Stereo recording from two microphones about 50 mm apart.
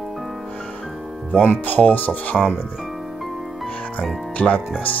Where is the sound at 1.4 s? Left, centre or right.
Left.